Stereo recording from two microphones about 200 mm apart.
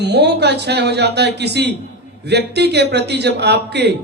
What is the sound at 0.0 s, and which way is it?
A man's voice, 55° right (ahead or behind).